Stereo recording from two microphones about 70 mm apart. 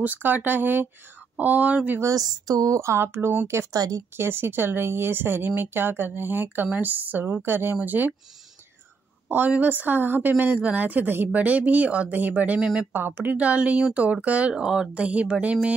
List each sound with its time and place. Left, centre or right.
0.0 s speech: right
2.0 s a woman's voice: right
3.0 s speech: right
3.7 s a woman's voice: right
4.2 s speech: right
9.3 s speech: right
12.5 s speech: centre
12.9 s speech: right
14.5 s speech: centre